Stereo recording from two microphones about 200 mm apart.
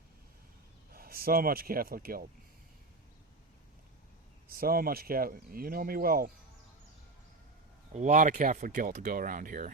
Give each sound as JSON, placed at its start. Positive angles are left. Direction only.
{"t": 0.9, "sound": "speech", "side_deg": -50}
{"t": 4.4, "sound": "speech", "side_deg": -50}
{"t": 7.9, "sound": "speech", "side_deg": -40}